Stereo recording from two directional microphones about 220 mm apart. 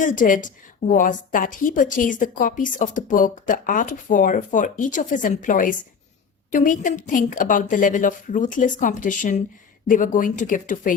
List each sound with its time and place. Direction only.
0.0 s a woman's voice: 35° left (ahead or behind)